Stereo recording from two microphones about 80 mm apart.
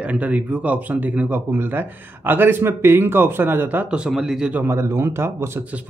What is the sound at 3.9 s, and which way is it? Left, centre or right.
Speech, centre.